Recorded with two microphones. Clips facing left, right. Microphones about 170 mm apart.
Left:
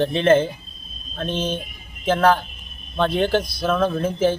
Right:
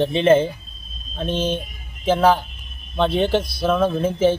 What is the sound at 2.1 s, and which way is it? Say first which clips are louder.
Speech: right 1 dB; 5° right (ahead or behind).